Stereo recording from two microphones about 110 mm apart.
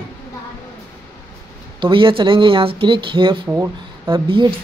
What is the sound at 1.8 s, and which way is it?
Speech, 50° right (ahead or behind).